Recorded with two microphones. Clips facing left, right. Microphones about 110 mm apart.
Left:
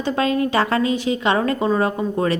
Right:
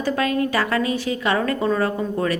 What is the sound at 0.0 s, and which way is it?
A woman's voice, 25° left (ahead or behind).